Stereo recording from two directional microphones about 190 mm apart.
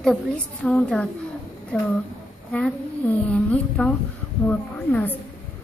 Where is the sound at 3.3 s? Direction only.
5° left (ahead or behind).